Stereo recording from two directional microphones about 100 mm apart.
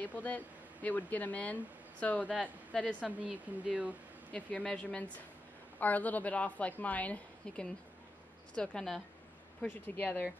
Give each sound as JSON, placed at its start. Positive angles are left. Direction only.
{"t": 0.0, "sound": "a woman's voice", "side_deg": 15}
{"t": 3.0, "sound": "speech", "side_deg": -10}
{"t": 4.3, "sound": "a woman's voice", "side_deg": 15}
{"t": 9.9, "sound": "a woman's voice", "side_deg": 15}